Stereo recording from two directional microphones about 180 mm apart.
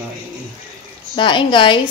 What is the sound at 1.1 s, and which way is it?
Speech, 25° left (ahead or behind).